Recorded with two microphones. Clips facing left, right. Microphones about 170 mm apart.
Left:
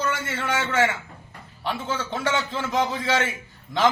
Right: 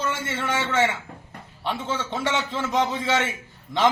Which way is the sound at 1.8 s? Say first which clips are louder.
Even; 25° right (ahead or behind).